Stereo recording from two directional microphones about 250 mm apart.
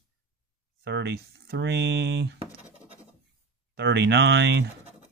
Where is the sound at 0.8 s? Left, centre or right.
Right.